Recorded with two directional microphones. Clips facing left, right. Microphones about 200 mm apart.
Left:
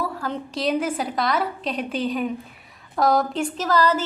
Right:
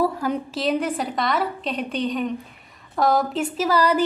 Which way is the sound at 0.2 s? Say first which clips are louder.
Right 4 dB; 10° right (ahead or behind).